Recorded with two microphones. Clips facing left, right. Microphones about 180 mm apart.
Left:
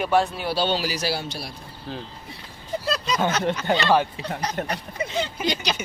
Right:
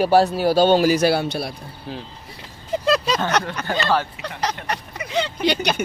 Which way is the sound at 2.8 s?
90° right.